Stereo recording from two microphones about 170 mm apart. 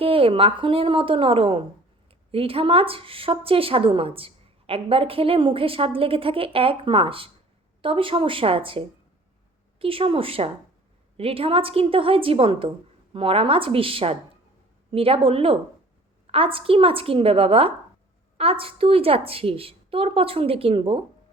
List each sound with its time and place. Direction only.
0.0 s a woman's voice: 35° right (ahead or behind)